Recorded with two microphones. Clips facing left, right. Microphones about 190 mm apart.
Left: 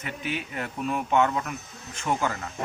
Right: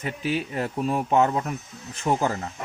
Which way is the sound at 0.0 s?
35° right (ahead or behind).